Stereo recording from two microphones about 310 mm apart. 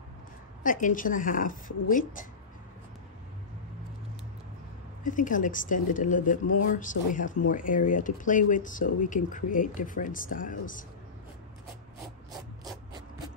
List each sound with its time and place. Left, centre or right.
0.7 s speech: left
5.0 s speech: left